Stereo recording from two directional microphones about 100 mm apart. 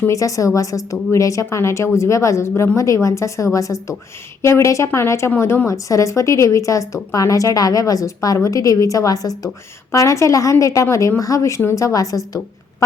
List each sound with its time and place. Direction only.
0.1 s a woman's voice: 35° left (ahead or behind)